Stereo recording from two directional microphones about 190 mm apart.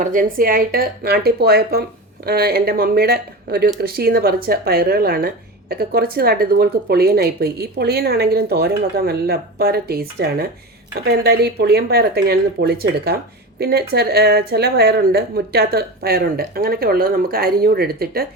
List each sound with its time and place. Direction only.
0.0 s speech: 45° right (ahead or behind)